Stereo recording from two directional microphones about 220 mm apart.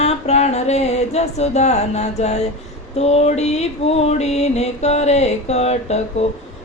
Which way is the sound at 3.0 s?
30° left (ahead or behind).